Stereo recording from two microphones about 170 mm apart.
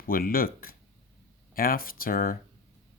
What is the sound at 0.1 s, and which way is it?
Speech, 60° left (ahead or behind).